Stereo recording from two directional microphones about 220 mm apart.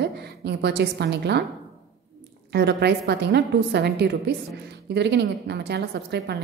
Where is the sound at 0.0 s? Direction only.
50° right (ahead or behind).